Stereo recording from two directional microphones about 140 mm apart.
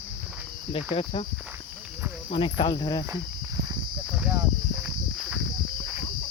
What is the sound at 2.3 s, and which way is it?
Cricket, 35° left (ahead or behind).